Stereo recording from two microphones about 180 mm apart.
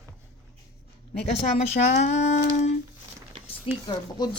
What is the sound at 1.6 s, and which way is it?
Speech, 40° left (ahead or behind).